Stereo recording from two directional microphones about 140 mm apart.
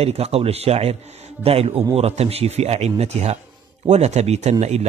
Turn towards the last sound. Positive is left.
turn(degrees=-50)  # may be behind; listen again after turning